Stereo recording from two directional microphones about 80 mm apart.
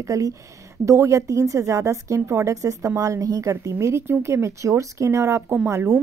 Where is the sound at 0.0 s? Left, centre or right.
Right.